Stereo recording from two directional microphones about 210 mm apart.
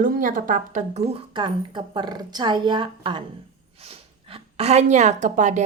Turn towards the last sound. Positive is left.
turn(degrees=-35)  # may be behind; listen again after turning